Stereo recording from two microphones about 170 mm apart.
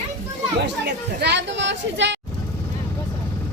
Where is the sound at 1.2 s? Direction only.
85° right.